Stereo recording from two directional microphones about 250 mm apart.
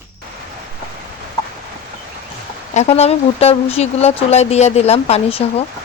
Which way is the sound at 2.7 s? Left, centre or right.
Left.